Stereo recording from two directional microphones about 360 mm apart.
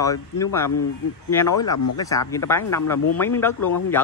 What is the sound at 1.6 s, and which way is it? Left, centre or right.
Speech, left.